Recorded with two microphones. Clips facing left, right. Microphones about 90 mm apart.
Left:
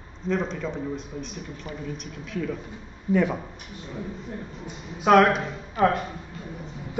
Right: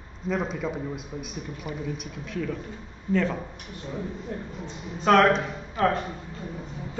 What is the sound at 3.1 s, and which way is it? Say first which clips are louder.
Speech: left 2 dB; 15° left (ahead or behind).